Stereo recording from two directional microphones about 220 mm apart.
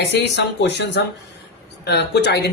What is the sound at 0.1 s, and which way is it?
Speech, 50° left (ahead or behind).